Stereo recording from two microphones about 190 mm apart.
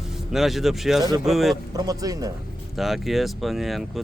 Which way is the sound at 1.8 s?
20° right (ahead or behind).